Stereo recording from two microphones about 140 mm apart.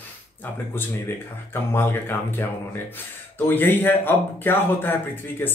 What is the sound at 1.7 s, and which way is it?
Speech, 15° left (ahead or behind).